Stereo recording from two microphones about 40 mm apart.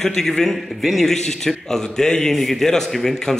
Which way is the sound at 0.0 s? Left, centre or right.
Centre.